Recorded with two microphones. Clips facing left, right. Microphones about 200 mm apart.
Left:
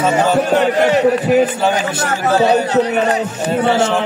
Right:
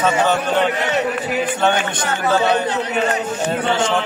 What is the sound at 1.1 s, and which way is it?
Speech, 40° left (ahead or behind).